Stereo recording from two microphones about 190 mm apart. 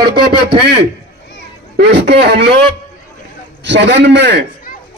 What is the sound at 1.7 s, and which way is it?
Speech, 60° right (ahead or behind).